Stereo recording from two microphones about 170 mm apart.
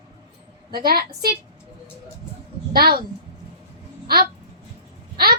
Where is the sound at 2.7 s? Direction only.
65° right (ahead or behind).